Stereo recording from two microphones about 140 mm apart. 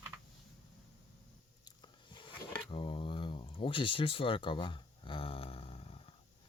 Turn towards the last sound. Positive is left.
turn(degrees=45)  # may be behind; listen again after turning